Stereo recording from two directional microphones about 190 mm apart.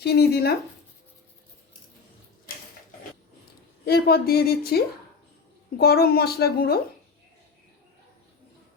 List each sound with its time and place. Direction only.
0.0 s a woman's voice: 55° left (ahead or behind)
2.5 s a sound: 50° left (ahead or behind)
3.8 s a woman's voice: 55° left (ahead or behind)